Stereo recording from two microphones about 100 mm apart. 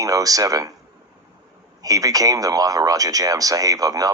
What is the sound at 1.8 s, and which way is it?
Speech, 35° right (ahead or behind).